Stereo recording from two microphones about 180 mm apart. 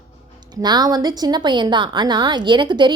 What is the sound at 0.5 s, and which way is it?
A woman's voice, 25° right (ahead or behind).